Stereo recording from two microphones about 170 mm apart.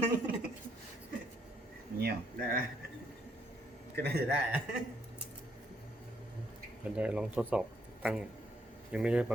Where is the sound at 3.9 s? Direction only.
70° right (ahead or behind).